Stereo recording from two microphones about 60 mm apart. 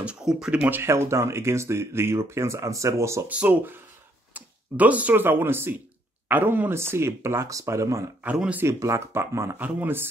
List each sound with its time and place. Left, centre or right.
0.0 s speech: centre
0.8 s speech: right
3.3 s speech: right
7.4 s speech: right
9.6 s speech: right